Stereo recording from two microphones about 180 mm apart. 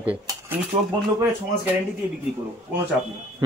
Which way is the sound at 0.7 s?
30° right (ahead or behind).